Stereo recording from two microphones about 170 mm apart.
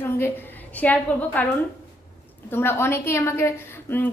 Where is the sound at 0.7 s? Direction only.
10° left (ahead or behind).